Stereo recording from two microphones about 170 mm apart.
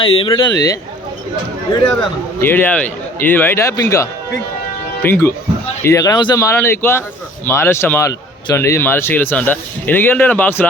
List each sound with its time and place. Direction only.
0.0 s speech: 35° left (ahead or behind)
2.4 s speech: 10° left (ahead or behind)